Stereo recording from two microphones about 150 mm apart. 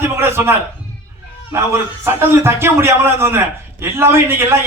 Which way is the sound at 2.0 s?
15° right (ahead or behind).